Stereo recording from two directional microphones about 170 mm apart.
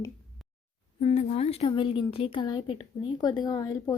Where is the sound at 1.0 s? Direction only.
40° left (ahead or behind).